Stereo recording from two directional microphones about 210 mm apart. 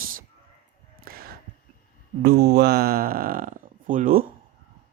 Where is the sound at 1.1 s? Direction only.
45° right (ahead or behind).